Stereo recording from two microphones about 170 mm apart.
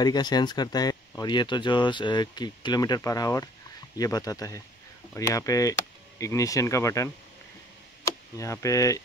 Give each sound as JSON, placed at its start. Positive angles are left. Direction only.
{"t": 0.0, "sound": "speech", "side_deg": 25}